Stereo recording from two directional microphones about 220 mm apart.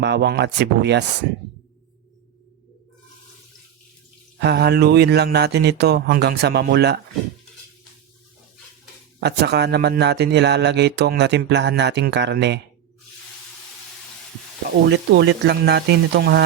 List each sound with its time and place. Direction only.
0.0 s speech: 50° right (ahead or behind)
4.4 s speech: 50° right (ahead or behind)
9.2 s speech: 50° right (ahead or behind)
14.8 s speech: 50° right (ahead or behind)